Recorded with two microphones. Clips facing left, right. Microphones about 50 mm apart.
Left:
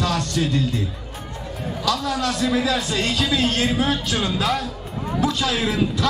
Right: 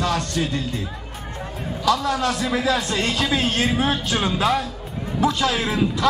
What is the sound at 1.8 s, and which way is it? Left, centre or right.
A man's voice, right.